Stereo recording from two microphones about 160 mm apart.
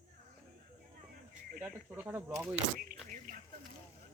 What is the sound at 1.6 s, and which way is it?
Speech, 10° right (ahead or behind).